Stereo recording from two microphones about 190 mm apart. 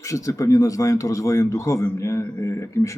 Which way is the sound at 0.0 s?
15° left (ahead or behind).